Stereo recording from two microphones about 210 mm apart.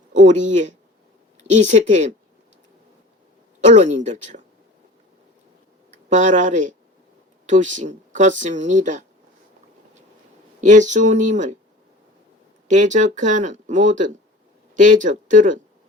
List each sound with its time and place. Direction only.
0.1 s speech: 35° right (ahead or behind)
3.6 s speech: 35° right (ahead or behind)
5.9 s speech: 35° right (ahead or behind)
10.6 s speech: 35° right (ahead or behind)
12.6 s speech: 35° right (ahead or behind)